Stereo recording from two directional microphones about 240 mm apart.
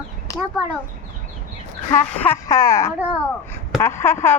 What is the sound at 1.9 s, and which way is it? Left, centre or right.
Speech, centre.